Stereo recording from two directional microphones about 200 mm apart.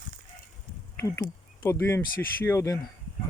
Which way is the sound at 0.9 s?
15° left (ahead or behind).